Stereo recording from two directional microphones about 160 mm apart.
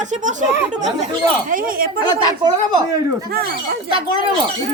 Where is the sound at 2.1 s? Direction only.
30° right (ahead or behind).